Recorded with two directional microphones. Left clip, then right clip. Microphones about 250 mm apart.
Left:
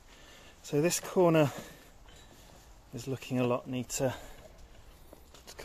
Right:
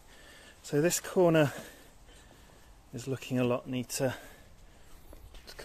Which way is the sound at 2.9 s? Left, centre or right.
Centre.